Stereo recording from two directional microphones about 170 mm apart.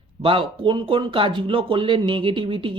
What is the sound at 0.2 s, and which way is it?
Speech, 30° right (ahead or behind).